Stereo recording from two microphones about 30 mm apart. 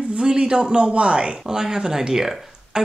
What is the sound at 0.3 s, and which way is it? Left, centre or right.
A man's voice, right.